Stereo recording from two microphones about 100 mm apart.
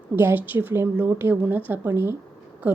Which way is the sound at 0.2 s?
20° right (ahead or behind).